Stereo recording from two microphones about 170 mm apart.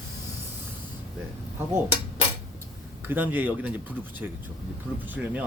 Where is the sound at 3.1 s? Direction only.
10° right (ahead or behind).